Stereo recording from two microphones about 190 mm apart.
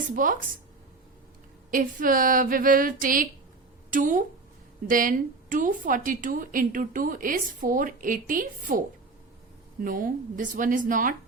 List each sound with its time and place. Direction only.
0.1 s speech: 45° right (ahead or behind)
1.7 s speech: 45° right (ahead or behind)
9.8 s speech: 45° right (ahead or behind)